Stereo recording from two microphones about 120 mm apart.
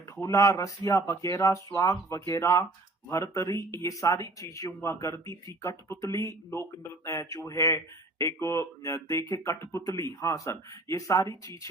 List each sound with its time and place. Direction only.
0.2 s speech: 25° left (ahead or behind)